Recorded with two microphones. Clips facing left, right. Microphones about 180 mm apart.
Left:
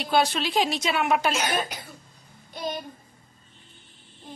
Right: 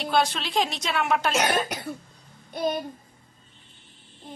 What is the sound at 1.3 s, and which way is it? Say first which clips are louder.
Child singing: right 3 dB; 70° right (ahead or behind).